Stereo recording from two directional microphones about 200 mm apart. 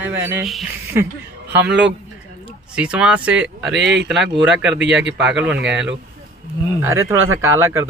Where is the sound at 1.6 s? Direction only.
60° right (ahead or behind).